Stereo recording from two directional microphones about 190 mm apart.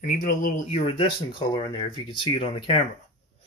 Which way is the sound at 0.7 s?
30° left (ahead or behind).